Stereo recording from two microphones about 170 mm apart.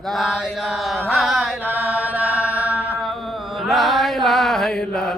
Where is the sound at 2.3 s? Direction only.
15° left (ahead or behind).